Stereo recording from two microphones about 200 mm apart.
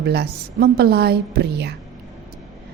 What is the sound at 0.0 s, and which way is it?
A woman's voice, 55° right (ahead or behind).